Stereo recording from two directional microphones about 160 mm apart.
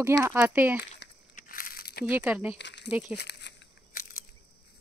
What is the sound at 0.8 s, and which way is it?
Crumpling, 75° left (ahead or behind).